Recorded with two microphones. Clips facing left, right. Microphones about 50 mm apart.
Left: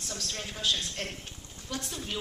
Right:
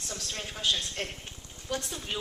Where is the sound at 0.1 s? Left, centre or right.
Centre.